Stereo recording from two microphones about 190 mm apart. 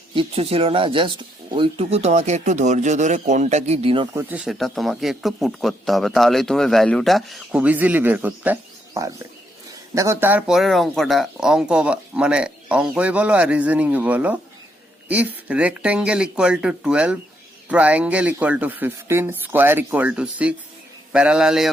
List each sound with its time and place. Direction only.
0.1 s speech: 30° right (ahead or behind)
4.1 s a man's voice: 10° right (ahead or behind)